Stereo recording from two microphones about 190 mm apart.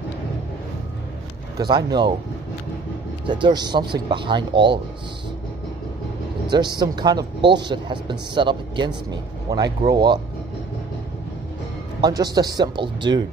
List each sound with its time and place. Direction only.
1.7 s speech: 25° right (ahead or behind)
3.3 s speech: 25° right (ahead or behind)
6.5 s speech: 25° right (ahead or behind)
12.0 s speech: 20° right (ahead or behind)